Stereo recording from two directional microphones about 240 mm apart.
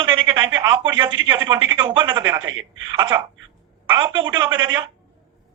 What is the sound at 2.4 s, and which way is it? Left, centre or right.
Speech, right.